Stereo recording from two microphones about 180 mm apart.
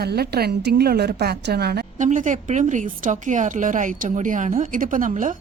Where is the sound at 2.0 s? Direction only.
45° right (ahead or behind).